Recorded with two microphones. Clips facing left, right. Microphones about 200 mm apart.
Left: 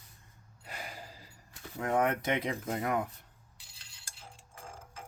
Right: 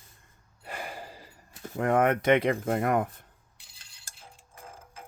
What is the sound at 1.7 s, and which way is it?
Speech, 60° right (ahead or behind).